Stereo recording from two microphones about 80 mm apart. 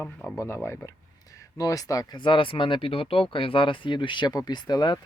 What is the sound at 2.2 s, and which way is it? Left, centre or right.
Speech, left.